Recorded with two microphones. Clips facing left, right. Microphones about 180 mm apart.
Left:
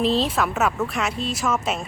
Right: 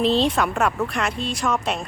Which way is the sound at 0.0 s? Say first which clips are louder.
Right 2 dB; centre (ahead or behind).